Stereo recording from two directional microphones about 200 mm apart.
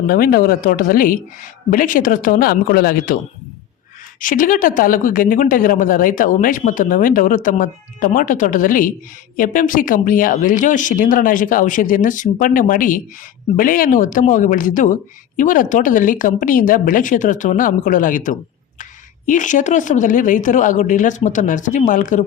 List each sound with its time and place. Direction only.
0.1 s speech: 45° left (ahead or behind)
4.2 s speech: 45° left (ahead or behind)